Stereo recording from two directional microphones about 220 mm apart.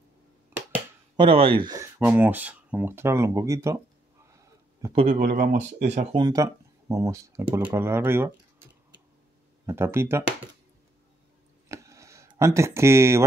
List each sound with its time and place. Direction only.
0.6 s a sound: 10° right (ahead or behind)
1.1 s speech: 25° right (ahead or behind)
4.9 s speech: 35° right (ahead or behind)
6.1 s speech: 15° right (ahead or behind)
9.7 s speech: 10° right (ahead or behind)
11.7 s a sound: 15° right (ahead or behind)